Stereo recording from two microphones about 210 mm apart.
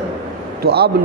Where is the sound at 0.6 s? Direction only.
50° right (ahead or behind).